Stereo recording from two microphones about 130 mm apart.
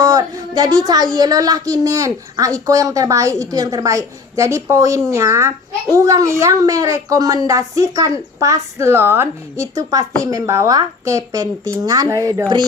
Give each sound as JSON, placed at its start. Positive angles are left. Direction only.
{"t": 0.0, "sound": "a woman's voice", "side_deg": -30}